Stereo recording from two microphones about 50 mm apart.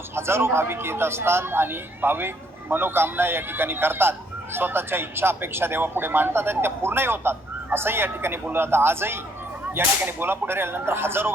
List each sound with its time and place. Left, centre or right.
0.2 s speech: right